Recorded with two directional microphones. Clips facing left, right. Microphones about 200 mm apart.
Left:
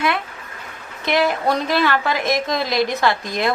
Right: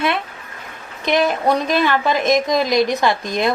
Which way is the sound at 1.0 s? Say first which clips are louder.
Right 2 dB; 20° right (ahead or behind).